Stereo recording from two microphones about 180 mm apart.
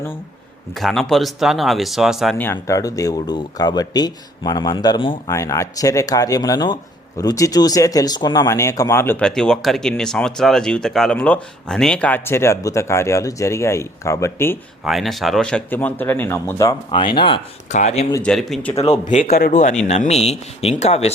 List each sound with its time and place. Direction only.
0.8 s speech: centre (ahead or behind)
2.4 s speech: 15° left (ahead or behind)
5.3 s speech: 15° left (ahead or behind)
14.8 s speech: centre (ahead or behind); by 17.4 s 25° left (ahead or behind)
17.7 s speech: 40° left (ahead or behind)
18.2 s speech: centre (ahead or behind)
19.0 s speech: 45° left (ahead or behind)
19.9 s speech: 40° left (ahead or behind)